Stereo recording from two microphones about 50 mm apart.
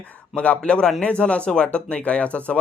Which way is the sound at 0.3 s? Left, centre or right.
Left.